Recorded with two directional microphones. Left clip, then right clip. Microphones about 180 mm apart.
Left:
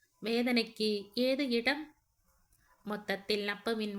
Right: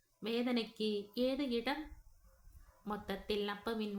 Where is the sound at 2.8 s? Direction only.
15° left (ahead or behind).